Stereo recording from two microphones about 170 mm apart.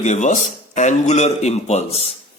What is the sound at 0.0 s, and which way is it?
A man's voice, 45° left (ahead or behind).